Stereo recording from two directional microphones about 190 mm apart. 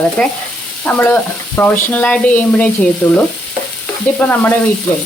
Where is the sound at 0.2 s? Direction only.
10° left (ahead or behind).